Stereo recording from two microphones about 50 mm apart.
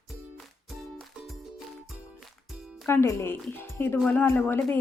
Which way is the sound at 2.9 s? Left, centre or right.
Left.